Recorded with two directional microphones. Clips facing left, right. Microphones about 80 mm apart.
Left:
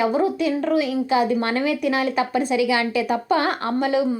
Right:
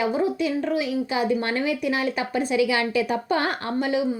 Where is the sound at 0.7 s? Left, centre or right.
Right.